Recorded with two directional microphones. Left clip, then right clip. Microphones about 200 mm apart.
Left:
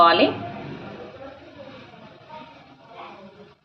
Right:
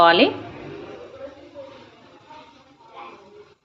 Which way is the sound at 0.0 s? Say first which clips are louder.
Right 1 dB; 30° right (ahead or behind).